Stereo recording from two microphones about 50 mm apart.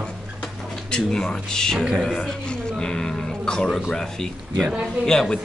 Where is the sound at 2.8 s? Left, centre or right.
Centre.